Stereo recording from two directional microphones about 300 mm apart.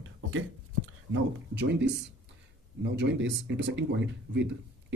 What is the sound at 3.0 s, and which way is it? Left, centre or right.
Speech, right.